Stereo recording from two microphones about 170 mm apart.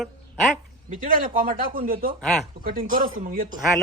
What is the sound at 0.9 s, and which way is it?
A man's voice, 55° right (ahead or behind).